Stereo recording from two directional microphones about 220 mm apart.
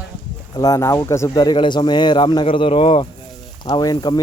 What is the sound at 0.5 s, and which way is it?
Speech, 15° left (ahead or behind).